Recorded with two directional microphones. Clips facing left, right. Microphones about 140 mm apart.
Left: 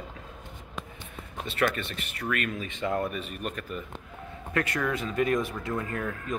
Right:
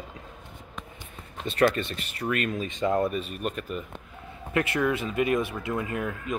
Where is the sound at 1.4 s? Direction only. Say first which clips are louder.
Right 5 dB; 35° right (ahead or behind).